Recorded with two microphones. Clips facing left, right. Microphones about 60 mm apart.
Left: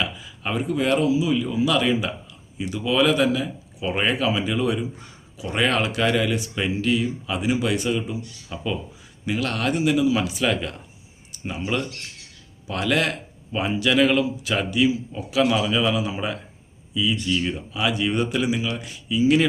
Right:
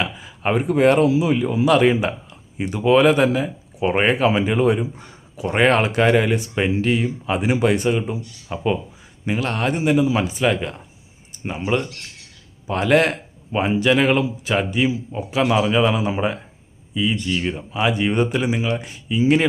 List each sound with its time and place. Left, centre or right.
0.0 s speech: right